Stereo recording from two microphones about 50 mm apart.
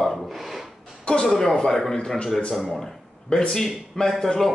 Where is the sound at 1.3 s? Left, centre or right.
Centre.